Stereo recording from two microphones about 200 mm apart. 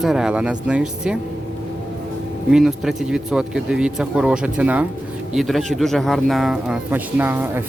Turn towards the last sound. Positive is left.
turn(degrees=-10)  # may be behind; listen again after turning